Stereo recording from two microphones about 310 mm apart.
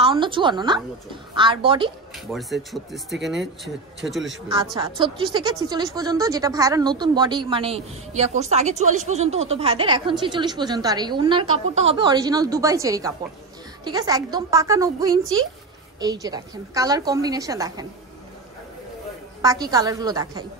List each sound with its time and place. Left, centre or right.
0.0 s a woman's voice: centre
2.1 s speech: centre
4.7 s speech: centre
19.4 s speech: centre